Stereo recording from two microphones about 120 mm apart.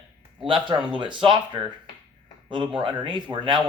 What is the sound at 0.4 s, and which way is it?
Speech, 45° right (ahead or behind).